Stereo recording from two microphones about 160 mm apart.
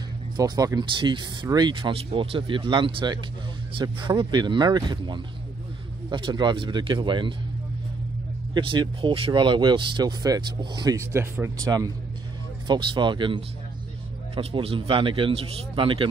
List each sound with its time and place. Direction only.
0.4 s speech: 25° right (ahead or behind)
8.5 s speech: 30° right (ahead or behind)